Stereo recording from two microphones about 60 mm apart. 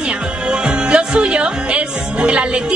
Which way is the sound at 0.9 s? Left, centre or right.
Centre.